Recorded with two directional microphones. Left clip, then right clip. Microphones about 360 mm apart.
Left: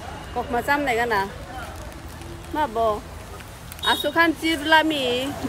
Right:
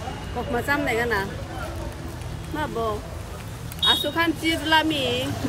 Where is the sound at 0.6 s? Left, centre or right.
Centre.